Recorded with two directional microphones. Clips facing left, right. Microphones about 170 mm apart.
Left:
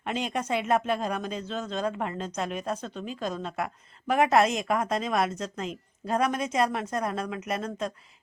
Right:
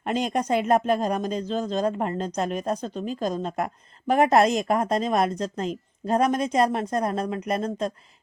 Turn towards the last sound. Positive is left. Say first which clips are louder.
# right 5 dB
turn(degrees=-35)  # may be behind; listen again after turning